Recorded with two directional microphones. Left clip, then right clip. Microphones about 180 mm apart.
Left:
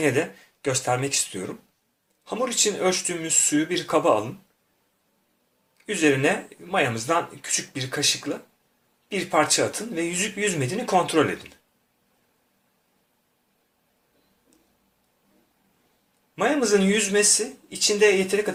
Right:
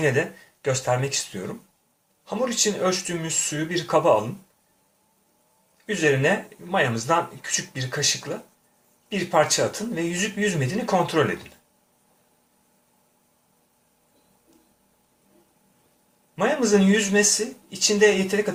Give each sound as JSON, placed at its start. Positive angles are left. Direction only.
{"t": 0.0, "sound": "speech", "side_deg": 30}
{"t": 5.7, "sound": "speech", "side_deg": 30}
{"t": 9.0, "sound": "speech", "side_deg": 35}
{"t": 16.3, "sound": "speech", "side_deg": 30}